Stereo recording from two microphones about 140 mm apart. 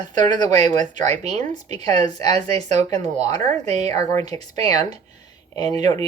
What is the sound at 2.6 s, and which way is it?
Speech, 55° right (ahead or behind).